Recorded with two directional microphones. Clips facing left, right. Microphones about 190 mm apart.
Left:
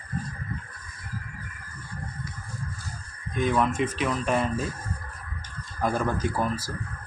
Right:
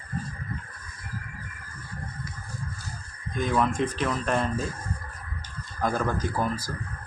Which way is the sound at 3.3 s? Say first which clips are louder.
Left 1 dB; centre (ahead or behind).